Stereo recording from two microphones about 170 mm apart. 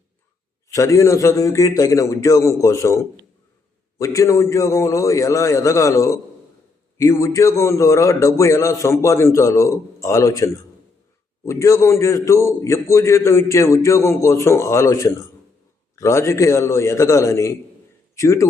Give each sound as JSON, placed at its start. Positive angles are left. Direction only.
{"t": 0.7, "sound": "a man's voice", "side_deg": 20}